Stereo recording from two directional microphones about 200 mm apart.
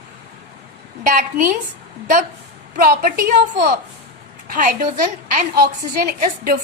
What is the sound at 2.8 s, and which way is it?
Speech, 45° right (ahead or behind).